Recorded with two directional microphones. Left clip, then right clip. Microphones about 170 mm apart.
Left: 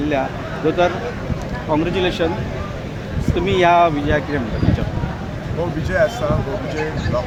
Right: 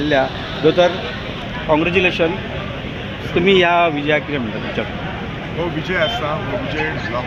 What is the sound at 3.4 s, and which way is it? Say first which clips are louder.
Speech: even; 50° right (ahead or behind).